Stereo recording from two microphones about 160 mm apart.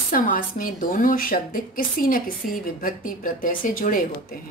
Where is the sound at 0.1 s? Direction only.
60° left (ahead or behind).